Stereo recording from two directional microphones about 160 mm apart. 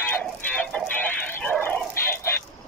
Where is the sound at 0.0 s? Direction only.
10° left (ahead or behind).